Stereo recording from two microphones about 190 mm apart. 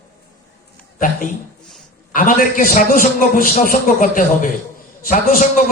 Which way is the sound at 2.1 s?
45° left (ahead or behind).